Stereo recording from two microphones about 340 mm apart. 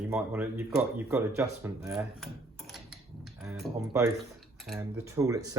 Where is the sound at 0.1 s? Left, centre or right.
Centre.